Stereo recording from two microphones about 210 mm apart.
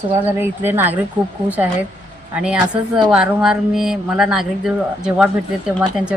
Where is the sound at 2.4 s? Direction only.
5° right (ahead or behind).